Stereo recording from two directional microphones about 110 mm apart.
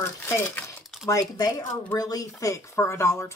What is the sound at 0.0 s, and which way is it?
Speech, 20° left (ahead or behind).